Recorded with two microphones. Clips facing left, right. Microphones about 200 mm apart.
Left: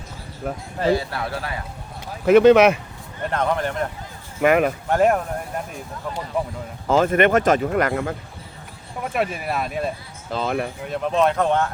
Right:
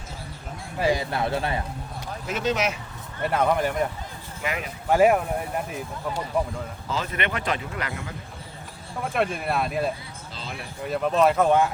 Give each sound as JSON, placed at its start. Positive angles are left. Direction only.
{"t": 0.4, "sound": "speech", "side_deg": 60}
{"t": 0.8, "sound": "speech", "side_deg": -15}
{"t": 2.2, "sound": "speech", "side_deg": 60}
{"t": 3.2, "sound": "speech", "side_deg": -10}
{"t": 4.4, "sound": "speech", "side_deg": 60}
{"t": 4.9, "sound": "speech", "side_deg": -5}
{"t": 6.8, "sound": "speech", "side_deg": 50}
{"t": 9.1, "sound": "speech", "side_deg": 5}
{"t": 10.3, "sound": "speech", "side_deg": 55}
{"t": 10.8, "sound": "speech", "side_deg": 0}